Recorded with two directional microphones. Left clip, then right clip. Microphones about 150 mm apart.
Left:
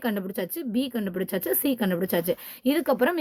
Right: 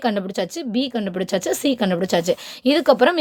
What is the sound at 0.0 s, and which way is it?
A woman's voice, 25° right (ahead or behind).